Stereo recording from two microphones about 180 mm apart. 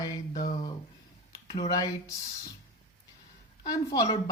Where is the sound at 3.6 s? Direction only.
20° left (ahead or behind).